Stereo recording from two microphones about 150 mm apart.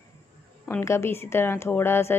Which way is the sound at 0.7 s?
20° left (ahead or behind).